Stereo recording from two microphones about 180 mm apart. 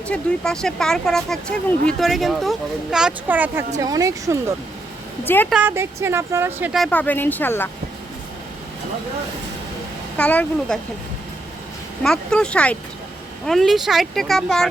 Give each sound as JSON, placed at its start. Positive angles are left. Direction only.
{"t": 0.1, "sound": "speech", "side_deg": 5}
{"t": 5.2, "sound": "a woman's voice", "side_deg": 10}
{"t": 5.5, "sound": "speech", "side_deg": -10}
{"t": 10.2, "sound": "a woman's voice", "side_deg": 5}
{"t": 12.0, "sound": "speech", "side_deg": 5}